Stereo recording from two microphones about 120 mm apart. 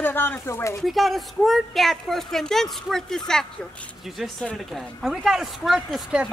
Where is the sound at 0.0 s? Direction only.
15° left (ahead or behind).